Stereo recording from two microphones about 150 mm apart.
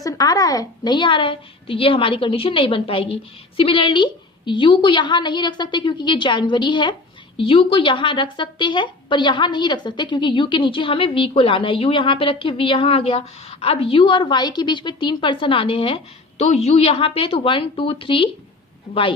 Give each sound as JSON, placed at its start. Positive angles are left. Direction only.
{"t": 0.0, "sound": "a woman's voice", "side_deg": 25}